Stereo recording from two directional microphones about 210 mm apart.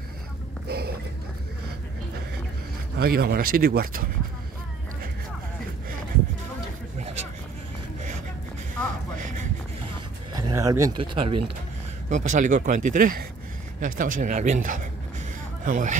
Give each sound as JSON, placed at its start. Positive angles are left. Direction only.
{"t": 0.7, "sound": "a sound", "side_deg": -50}
{"t": 3.0, "sound": "speech", "side_deg": -50}
{"t": 10.3, "sound": "speech", "side_deg": -15}
{"t": 12.1, "sound": "speech", "side_deg": -35}